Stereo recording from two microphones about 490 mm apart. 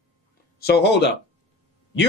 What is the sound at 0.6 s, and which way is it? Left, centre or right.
Speech, centre.